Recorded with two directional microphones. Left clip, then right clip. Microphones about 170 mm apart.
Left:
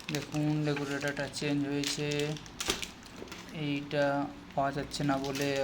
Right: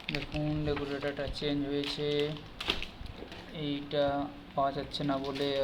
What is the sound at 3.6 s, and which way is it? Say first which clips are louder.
Speech: even; 20° left (ahead or behind).